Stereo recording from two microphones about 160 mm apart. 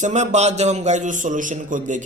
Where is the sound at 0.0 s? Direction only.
45° right (ahead or behind).